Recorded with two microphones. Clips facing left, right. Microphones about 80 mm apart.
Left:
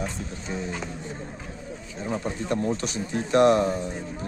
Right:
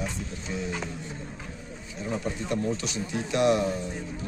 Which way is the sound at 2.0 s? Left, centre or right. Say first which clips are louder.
Left 2 dB; left.